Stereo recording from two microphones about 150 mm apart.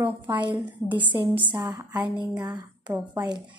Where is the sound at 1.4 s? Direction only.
25° right (ahead or behind).